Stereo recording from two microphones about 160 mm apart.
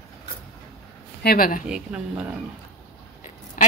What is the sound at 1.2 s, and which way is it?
Speech, 70° left (ahead or behind).